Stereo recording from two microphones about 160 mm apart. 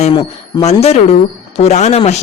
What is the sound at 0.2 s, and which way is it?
Speech, 40° left (ahead or behind).